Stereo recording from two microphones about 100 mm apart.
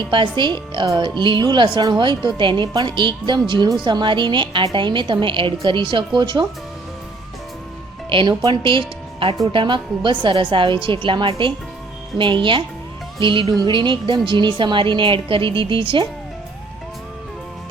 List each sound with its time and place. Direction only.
0.0 s a woman's voice: 55° right (ahead or behind)
8.1 s a woman's voice: 50° right (ahead or behind)
13.7 s a woman's voice: 55° right (ahead or behind)